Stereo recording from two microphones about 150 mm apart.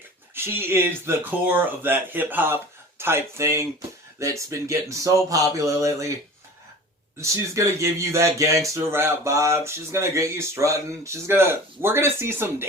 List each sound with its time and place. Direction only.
0.3 s speech: 15° right (ahead or behind)
7.2 s speech: 20° right (ahead or behind)